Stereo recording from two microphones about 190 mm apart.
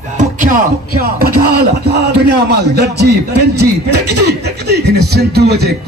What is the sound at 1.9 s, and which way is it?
A man's voice, 60° right (ahead or behind).